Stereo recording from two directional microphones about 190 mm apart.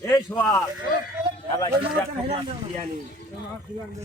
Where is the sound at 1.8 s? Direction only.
30° right (ahead or behind).